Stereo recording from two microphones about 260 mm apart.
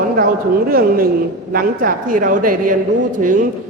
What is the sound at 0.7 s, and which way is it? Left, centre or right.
A man's voice, right.